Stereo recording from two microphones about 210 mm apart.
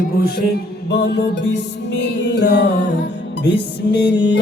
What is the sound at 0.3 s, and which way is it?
Music, 45° left (ahead or behind).